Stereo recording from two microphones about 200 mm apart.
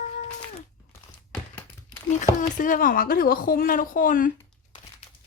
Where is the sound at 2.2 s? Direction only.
40° left (ahead or behind).